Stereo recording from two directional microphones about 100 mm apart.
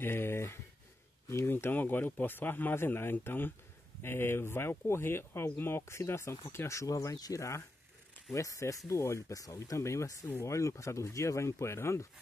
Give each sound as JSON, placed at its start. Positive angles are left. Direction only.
{"t": 0.0, "sound": "speech", "side_deg": 25}